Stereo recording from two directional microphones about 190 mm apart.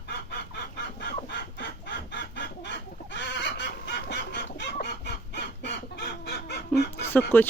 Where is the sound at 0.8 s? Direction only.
65° left (ahead or behind).